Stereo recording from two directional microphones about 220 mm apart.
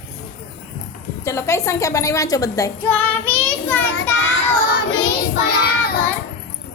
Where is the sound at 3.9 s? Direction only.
60° left (ahead or behind).